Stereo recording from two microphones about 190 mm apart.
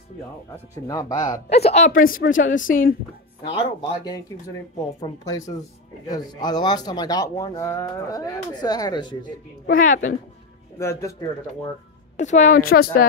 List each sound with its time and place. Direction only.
0.8 s speech: 20° left (ahead or behind)
1.5 s a woman's voice: 35° left (ahead or behind)
3.4 s speech: 20° left (ahead or behind)
9.7 s a woman's voice: 45° left (ahead or behind)
10.8 s a man's voice: 15° left (ahead or behind)
12.2 s a woman's voice: 40° left (ahead or behind)